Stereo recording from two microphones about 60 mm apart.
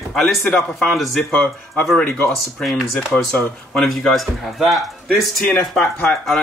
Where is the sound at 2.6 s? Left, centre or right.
Centre.